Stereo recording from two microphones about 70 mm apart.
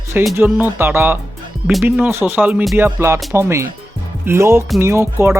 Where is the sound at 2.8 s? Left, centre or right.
Right.